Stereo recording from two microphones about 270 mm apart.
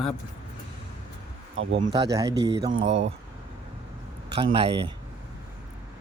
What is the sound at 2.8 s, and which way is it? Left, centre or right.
Speech, right.